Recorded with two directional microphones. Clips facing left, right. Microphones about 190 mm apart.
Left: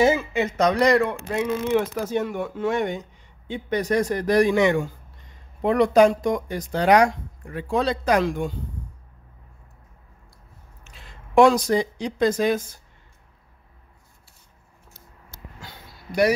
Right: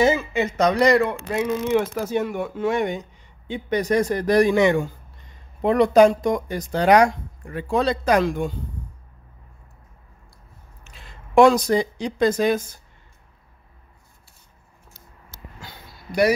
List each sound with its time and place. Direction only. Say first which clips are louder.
0.0 s speech: even; 10° left (ahead or behind); by 4.0 s 15° right (ahead or behind)
4.1 s speech: right 1 dB; 35° right (ahead or behind)
11.3 s speech: right 1 dB; 55° right (ahead or behind)